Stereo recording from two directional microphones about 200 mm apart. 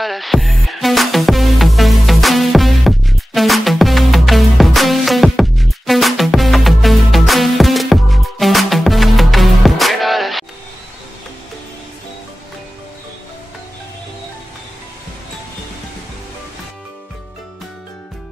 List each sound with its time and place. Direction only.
0.0 s music: centre (ahead or behind)